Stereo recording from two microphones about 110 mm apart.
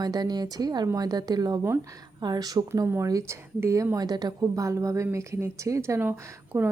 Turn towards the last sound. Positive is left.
turn(degrees=-15)  # may be behind; listen again after turning